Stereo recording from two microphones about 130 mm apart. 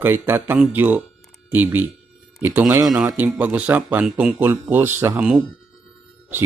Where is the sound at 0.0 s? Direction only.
15° right (ahead or behind).